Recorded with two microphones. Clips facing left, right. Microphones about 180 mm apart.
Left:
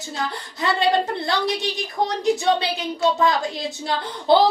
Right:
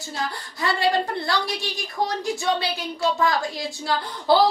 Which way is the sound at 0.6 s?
20° left (ahead or behind).